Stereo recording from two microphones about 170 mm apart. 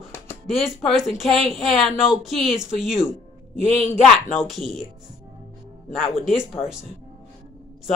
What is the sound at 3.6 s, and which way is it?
Speech, 45° left (ahead or behind).